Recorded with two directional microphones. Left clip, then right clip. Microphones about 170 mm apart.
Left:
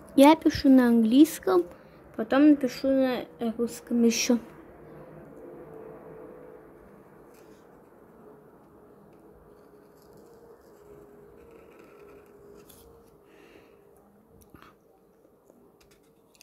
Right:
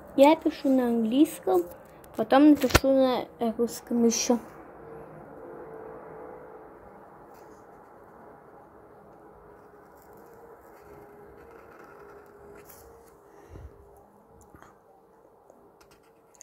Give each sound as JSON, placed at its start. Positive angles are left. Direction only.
{"t": 0.1, "sound": "speech", "side_deg": 45}
{"t": 2.1, "sound": "speech", "side_deg": 5}
{"t": 4.0, "sound": "speech", "side_deg": 15}